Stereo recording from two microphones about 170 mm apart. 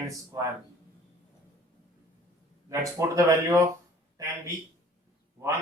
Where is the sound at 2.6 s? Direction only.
20° right (ahead or behind).